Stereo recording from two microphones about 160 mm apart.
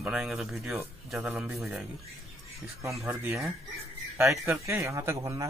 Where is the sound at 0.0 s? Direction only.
5° right (ahead or behind).